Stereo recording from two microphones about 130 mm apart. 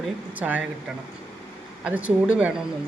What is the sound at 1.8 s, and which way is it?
Speech, 10° right (ahead or behind).